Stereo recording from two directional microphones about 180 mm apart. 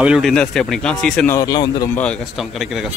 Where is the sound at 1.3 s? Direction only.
20° left (ahead or behind).